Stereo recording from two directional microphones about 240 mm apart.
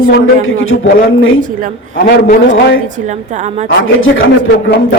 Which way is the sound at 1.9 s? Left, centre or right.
Left.